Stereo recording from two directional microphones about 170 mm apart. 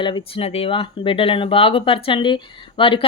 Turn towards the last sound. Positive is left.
turn(degrees=30)  # may be behind; listen again after turning